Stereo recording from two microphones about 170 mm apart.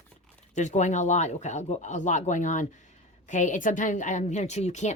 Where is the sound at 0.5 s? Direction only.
45° left (ahead or behind).